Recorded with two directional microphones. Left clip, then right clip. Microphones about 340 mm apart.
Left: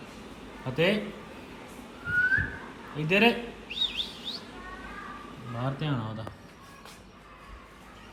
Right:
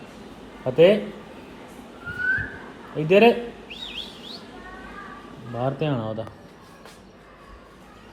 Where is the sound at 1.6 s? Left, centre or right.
Centre.